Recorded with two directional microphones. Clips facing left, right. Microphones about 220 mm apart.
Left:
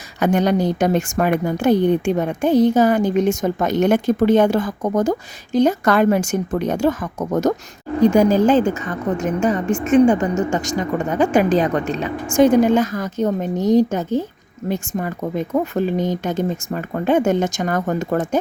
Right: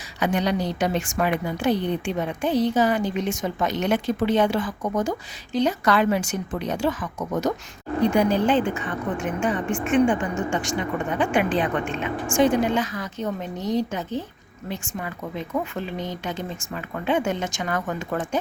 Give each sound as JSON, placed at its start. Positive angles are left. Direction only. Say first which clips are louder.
{"t": 0.2, "sound": "a woman's voice", "louder": "left 6 dB", "side_deg": 50}